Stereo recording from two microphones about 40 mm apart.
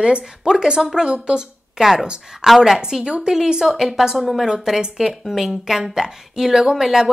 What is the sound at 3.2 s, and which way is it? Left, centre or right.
Speech, centre.